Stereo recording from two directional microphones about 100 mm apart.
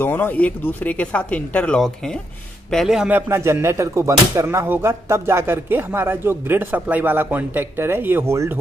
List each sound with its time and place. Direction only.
0.0 s speech: 20° left (ahead or behind)
2.7 s a man's voice: centre (ahead or behind)
3.1 s a sound: 25° right (ahead or behind)